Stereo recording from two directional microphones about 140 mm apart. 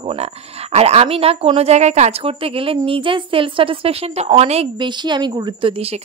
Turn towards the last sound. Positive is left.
turn(degrees=-45)  # may be behind; listen again after turning